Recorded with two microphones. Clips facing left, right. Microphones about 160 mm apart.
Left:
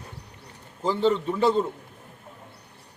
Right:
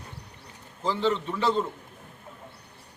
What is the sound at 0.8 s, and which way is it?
Speech, 45° left (ahead or behind).